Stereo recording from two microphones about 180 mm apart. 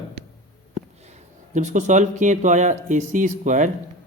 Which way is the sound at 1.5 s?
45° right (ahead or behind).